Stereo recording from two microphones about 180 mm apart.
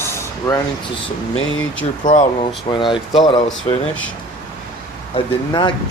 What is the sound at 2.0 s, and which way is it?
Speech, 45° left (ahead or behind).